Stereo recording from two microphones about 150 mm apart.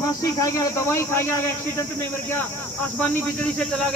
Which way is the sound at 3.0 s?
10° left (ahead or behind).